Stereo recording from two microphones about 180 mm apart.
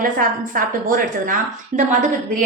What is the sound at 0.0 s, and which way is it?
A woman's voice, 50° right (ahead or behind).